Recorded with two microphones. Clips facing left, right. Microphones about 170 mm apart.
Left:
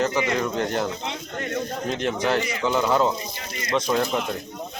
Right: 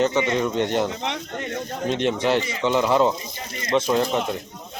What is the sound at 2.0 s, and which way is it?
Speech, 30° right (ahead or behind).